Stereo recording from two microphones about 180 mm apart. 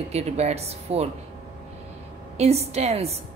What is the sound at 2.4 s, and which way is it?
Speech, 35° right (ahead or behind).